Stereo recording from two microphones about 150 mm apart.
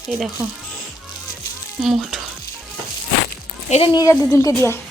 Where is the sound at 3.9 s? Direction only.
20° left (ahead or behind).